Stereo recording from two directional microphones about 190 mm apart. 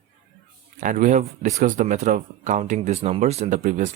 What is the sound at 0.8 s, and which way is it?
Speech, 45° right (ahead or behind).